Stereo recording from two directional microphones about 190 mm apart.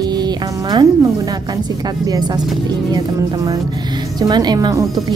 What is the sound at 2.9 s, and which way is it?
A woman's voice, 20° right (ahead or behind).